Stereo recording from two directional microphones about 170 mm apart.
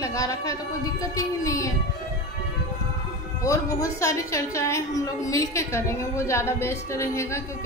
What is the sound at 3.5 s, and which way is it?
A woman's voice, 20° left (ahead or behind).